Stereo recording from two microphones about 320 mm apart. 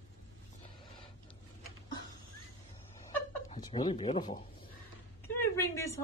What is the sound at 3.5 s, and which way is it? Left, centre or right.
Speech, centre.